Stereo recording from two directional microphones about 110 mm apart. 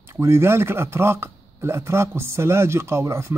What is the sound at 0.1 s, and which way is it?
Speech, 25° right (ahead or behind).